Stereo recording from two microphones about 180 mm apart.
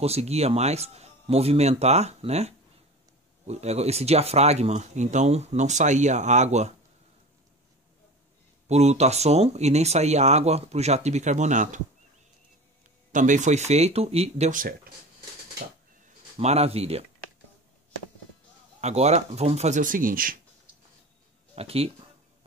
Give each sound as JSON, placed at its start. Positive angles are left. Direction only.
{"t": 0.0, "sound": "speech", "side_deg": -35}
{"t": 8.6, "sound": "speech", "side_deg": -35}
{"t": 13.1, "sound": "speech", "side_deg": -45}
{"t": 16.3, "sound": "speech", "side_deg": -35}
{"t": 18.8, "sound": "speech", "side_deg": -40}
{"t": 21.5, "sound": "speech", "side_deg": -35}